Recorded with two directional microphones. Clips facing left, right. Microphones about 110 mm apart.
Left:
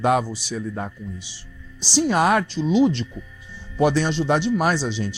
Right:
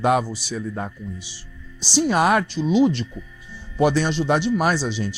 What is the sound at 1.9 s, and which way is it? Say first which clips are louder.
Speech: even; 15° right (ahead or behind).